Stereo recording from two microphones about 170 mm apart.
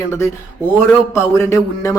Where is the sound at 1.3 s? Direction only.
15° left (ahead or behind).